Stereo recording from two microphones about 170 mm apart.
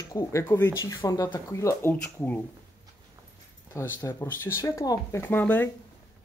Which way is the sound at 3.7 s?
15° left (ahead or behind).